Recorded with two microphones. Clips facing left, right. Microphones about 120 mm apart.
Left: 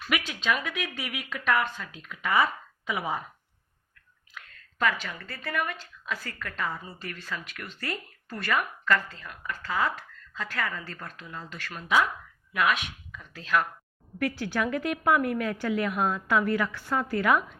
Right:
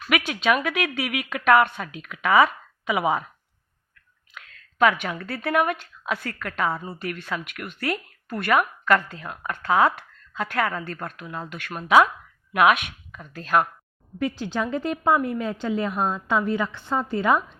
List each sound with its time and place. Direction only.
0.1 s a woman's voice: 65° right (ahead or behind)
4.4 s a woman's voice: 65° right (ahead or behind)
11.9 s a woman's voice: 75° right (ahead or behind); by 13.7 s 45° right (ahead or behind)
14.2 s a woman's voice: 20° right (ahead or behind)